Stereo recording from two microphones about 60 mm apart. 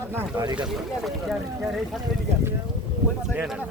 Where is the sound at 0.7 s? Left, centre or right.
Centre.